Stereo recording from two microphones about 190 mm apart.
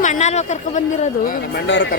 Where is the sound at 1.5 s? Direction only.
70° left (ahead or behind).